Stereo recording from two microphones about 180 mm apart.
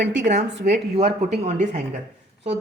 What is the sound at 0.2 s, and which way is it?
A woman's voice, 45° right (ahead or behind).